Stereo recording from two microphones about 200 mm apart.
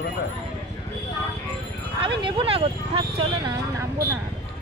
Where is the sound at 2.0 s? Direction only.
25° right (ahead or behind).